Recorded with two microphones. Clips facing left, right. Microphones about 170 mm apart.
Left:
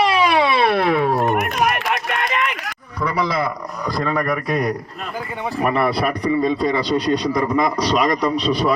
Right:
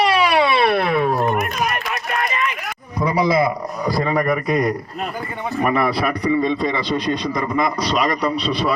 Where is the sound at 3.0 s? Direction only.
10° right (ahead or behind).